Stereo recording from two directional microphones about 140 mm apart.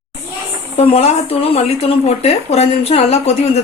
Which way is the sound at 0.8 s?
45° left (ahead or behind).